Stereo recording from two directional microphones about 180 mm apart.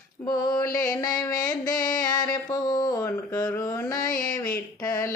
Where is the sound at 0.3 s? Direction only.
20° left (ahead or behind).